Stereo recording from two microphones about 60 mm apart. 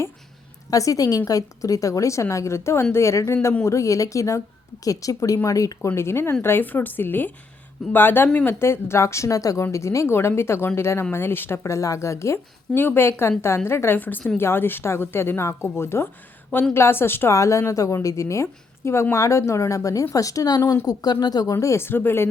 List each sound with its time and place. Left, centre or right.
0.7 s a woman's voice: left
4.8 s a woman's voice: left
5.9 s speech: left
6.4 s a woman's voice: left
9.7 s speech: left
11.6 s a woman's voice: left
12.7 s speech: left
14.0 s speech: left
17.3 s a woman's voice: left
21.8 s speech: left